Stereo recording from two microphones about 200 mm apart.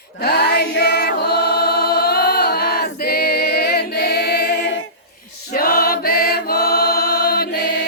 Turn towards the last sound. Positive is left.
turn(degrees=50)  # may be behind; listen again after turning